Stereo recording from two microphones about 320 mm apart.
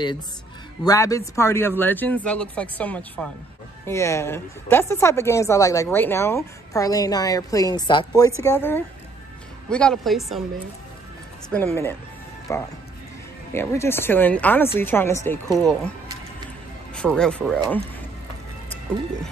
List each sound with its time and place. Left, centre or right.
0.8 s a woman's voice: centre
11.5 s a woman's voice: centre
16.9 s speech: centre